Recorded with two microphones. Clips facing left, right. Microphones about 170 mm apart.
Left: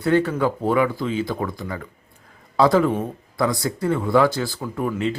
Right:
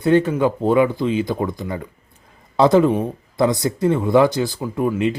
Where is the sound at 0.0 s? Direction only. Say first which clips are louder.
Right 3 dB; 20° right (ahead or behind).